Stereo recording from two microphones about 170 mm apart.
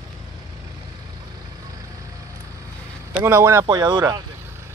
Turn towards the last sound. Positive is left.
turn(degrees=-25)  # may be behind; listen again after turning